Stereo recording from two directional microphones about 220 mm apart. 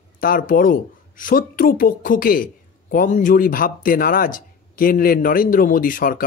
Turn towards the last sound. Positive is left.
turn(degrees=40)  # may be behind; listen again after turning